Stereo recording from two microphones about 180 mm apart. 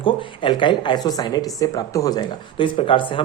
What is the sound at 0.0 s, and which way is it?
Speech, 30° left (ahead or behind).